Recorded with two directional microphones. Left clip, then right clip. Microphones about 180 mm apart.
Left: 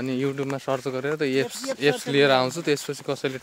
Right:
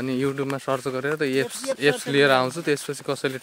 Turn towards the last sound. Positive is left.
turn(degrees=-10)  # may be behind; listen again after turning